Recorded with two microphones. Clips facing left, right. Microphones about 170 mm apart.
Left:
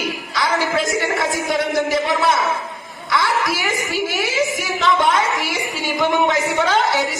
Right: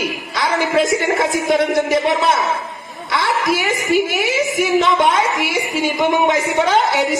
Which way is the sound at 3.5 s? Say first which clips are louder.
Right 5 dB; 20° right (ahead or behind).